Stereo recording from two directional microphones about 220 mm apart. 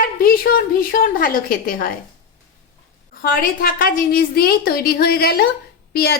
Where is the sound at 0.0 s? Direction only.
40° left (ahead or behind).